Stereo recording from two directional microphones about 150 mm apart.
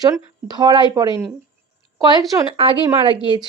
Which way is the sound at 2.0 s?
30° right (ahead or behind).